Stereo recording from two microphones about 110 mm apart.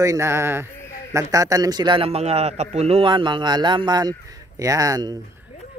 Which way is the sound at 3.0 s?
45° right (ahead or behind).